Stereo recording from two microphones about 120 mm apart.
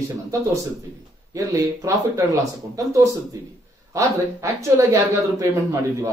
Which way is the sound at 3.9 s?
25° right (ahead or behind).